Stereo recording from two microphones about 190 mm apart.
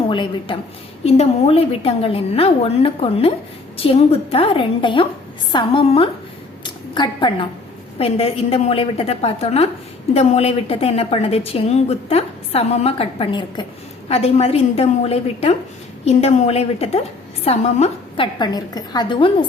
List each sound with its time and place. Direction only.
0.1 s a woman's voice: 25° left (ahead or behind)
18.3 s a woman's voice: 20° left (ahead or behind)